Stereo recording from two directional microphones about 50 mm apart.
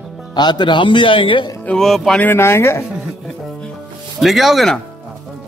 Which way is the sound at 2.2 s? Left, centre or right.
Left.